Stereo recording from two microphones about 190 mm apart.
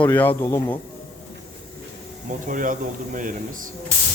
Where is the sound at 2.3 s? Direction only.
45° right (ahead or behind).